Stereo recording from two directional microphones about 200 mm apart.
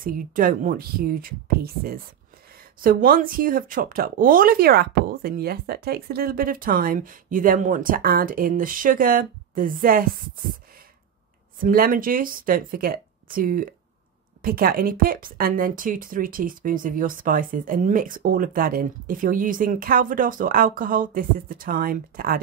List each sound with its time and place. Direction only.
0.0 s speech: 45° right (ahead or behind)
11.6 s speech: 45° right (ahead or behind)